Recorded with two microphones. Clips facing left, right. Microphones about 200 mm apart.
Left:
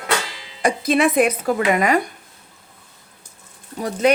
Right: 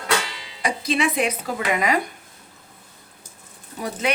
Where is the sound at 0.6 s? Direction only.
55° left (ahead or behind).